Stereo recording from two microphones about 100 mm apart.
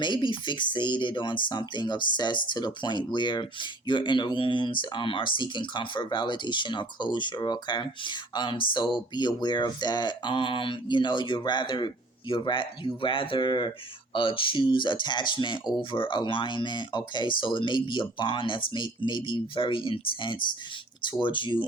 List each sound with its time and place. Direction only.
0.0 s speech: 55° left (ahead or behind)